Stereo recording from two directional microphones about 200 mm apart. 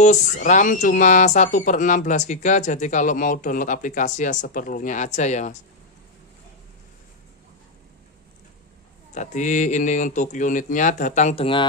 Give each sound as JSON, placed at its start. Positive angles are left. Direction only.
{"t": 0.0, "sound": "speech", "side_deg": 35}
{"t": 9.1, "sound": "speech", "side_deg": 35}